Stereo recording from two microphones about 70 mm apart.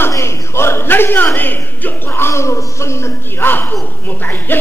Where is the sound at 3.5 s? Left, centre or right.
Left.